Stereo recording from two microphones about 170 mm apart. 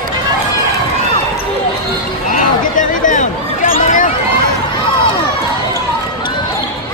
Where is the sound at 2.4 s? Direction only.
50° left (ahead or behind).